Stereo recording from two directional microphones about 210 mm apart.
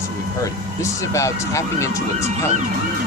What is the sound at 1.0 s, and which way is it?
Speech, 15° left (ahead or behind).